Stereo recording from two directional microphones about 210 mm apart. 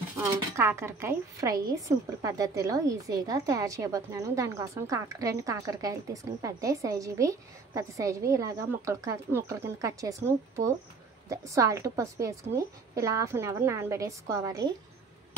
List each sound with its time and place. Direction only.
0.2 s a woman's voice: 15° right (ahead or behind)